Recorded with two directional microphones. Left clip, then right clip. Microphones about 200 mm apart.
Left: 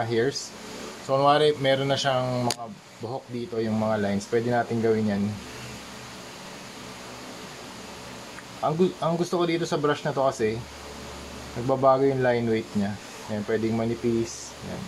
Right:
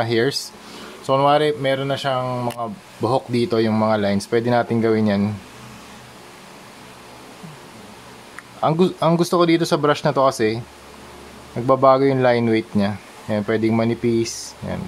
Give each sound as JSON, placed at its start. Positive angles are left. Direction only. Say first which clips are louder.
{"t": 0.0, "sound": "speech", "louder": "right 6 dB", "side_deg": -40}
{"t": 3.0, "sound": "speech", "louder": "right 14 dB", "side_deg": -40}
{"t": 8.6, "sound": "speech", "louder": "right 7 dB", "side_deg": -45}
{"t": 11.6, "sound": "speech", "louder": "right 6 dB", "side_deg": -40}